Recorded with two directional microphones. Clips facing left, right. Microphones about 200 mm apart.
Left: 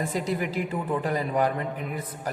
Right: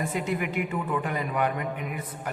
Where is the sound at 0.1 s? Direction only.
35° left (ahead or behind).